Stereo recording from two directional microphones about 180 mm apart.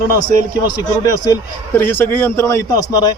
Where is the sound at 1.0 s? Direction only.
20° left (ahead or behind).